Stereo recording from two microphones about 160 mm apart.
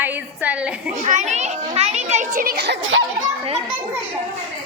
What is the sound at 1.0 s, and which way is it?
A child's voice, 50° right (ahead or behind).